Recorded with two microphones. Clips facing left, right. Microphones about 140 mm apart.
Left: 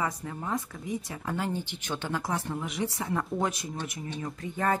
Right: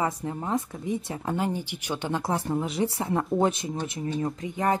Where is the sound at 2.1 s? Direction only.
30° right (ahead or behind).